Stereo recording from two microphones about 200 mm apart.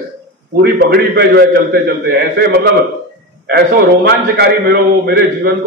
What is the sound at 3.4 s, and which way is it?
A man's voice, 55° right (ahead or behind).